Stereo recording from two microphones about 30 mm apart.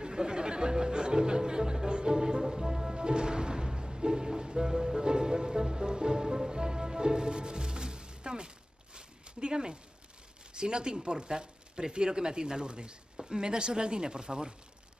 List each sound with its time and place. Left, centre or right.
0.0 s music: right
3.0 s music: right
6.5 s speech: right
8.9 s zipper: right
10.5 s speech: right